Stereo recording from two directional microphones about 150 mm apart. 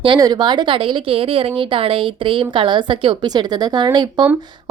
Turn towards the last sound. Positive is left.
turn(degrees=-30)  # may be behind; listen again after turning